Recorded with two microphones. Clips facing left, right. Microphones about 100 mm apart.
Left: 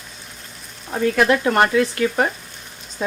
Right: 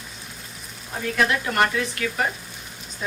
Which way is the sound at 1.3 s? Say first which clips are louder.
Left 6 dB; 35° left (ahead or behind).